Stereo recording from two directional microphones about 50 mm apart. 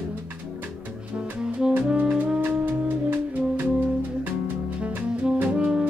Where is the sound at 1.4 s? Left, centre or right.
Centre.